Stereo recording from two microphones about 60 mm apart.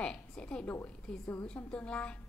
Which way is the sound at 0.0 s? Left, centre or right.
Centre.